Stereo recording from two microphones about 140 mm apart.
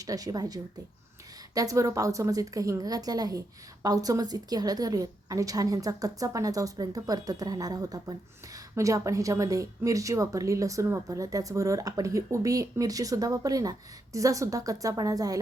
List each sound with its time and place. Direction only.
0.0 s a woman's voice: 25° right (ahead or behind)